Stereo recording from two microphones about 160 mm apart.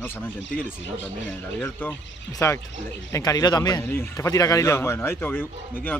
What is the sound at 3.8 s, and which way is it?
Speech, 15° left (ahead or behind).